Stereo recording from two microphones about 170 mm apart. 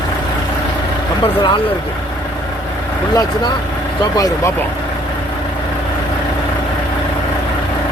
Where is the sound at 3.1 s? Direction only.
25° left (ahead or behind).